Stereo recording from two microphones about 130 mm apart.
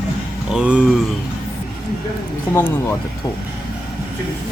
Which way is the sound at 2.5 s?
20° left (ahead or behind).